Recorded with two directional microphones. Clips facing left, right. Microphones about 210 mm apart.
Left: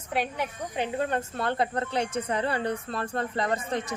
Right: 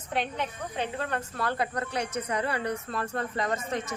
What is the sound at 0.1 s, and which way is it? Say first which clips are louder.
A man's voice: left 1 dB; 10° left (ahead or behind).